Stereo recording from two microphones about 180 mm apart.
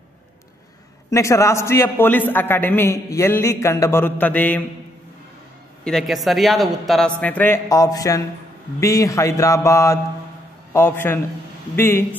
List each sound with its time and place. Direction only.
1.1 s a man's voice: 15° left (ahead or behind)
5.9 s a woman's voice: centre (ahead or behind)